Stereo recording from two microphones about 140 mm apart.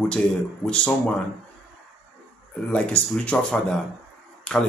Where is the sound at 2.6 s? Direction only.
10° left (ahead or behind).